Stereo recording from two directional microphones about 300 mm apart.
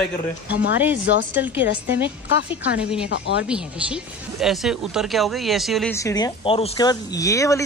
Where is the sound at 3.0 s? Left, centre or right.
Left.